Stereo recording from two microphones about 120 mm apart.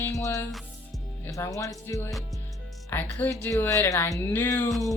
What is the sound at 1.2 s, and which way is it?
Speech, 25° left (ahead or behind).